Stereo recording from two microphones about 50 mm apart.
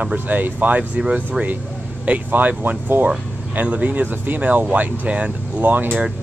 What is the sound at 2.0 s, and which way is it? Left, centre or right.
Speech, right.